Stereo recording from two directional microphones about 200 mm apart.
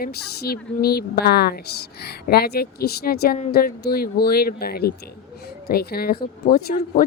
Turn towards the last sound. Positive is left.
turn(degrees=45)  # may be behind; listen again after turning